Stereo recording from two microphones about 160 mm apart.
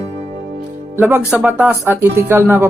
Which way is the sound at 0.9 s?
15° right (ahead or behind).